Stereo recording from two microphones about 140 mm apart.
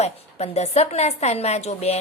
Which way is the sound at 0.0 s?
50° left (ahead or behind).